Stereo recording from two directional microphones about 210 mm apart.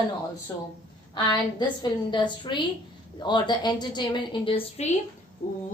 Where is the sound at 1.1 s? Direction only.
20° left (ahead or behind).